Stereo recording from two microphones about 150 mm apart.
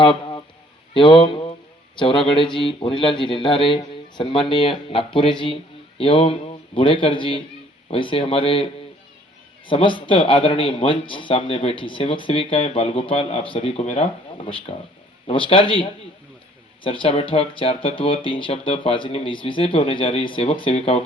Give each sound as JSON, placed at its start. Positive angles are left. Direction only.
{"t": 0.0, "sound": "a man's voice", "side_deg": 35}
{"t": 9.6, "sound": "speech", "side_deg": 35}